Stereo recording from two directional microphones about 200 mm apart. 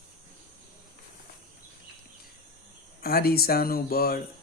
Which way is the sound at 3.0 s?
50° left (ahead or behind).